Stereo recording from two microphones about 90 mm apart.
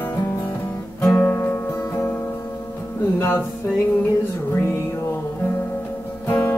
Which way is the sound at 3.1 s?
20° left (ahead or behind).